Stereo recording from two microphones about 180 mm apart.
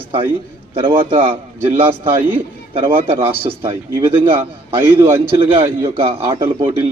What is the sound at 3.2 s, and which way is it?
Speech, 30° right (ahead or behind).